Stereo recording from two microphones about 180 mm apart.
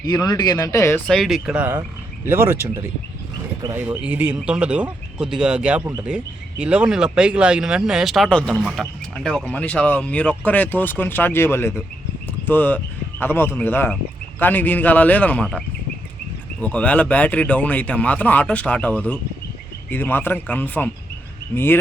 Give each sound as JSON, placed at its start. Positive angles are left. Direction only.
{"t": 0.0, "sound": "speech", "side_deg": 20}
{"t": 1.0, "sound": "speech", "side_deg": 0}